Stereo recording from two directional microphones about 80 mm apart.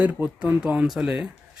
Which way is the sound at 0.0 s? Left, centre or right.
Centre.